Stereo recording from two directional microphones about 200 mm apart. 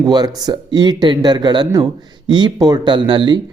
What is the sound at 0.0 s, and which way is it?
Speech, 20° right (ahead or behind).